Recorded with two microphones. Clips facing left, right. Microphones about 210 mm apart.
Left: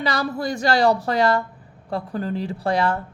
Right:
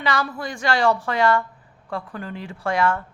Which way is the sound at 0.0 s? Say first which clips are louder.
Left 2 dB; 40° left (ahead or behind).